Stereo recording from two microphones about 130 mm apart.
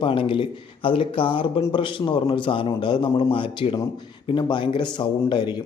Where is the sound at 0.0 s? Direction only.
40° left (ahead or behind).